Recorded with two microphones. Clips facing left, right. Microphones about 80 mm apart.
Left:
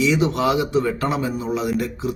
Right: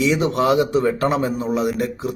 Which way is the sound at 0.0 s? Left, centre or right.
Right.